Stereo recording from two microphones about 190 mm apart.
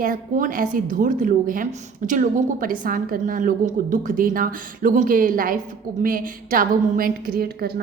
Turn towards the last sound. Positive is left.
turn(degrees=-50)  # may be behind; listen again after turning